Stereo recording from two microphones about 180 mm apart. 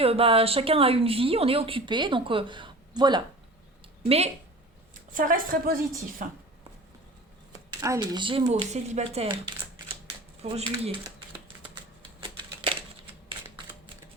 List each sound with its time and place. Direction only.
0.0 s speech: 30° right (ahead or behind)
5.1 s a woman's voice: 50° right (ahead or behind)
7.5 s speech: 20° right (ahead or behind)
12.2 s typewriter: 25° right (ahead or behind)